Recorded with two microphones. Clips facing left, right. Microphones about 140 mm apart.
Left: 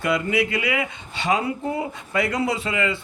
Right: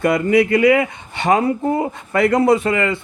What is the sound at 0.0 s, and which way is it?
Speech, 45° right (ahead or behind).